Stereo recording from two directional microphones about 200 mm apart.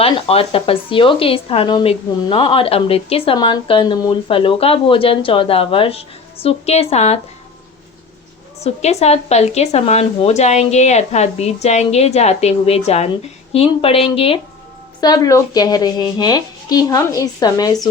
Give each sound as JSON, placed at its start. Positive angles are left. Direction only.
{"t": 0.0, "sound": "speech", "side_deg": 30}
{"t": 8.6, "sound": "speech", "side_deg": 35}
{"t": 15.0, "sound": "speech", "side_deg": 20}